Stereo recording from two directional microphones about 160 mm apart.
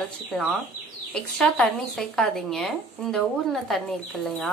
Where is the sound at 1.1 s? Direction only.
5° left (ahead or behind).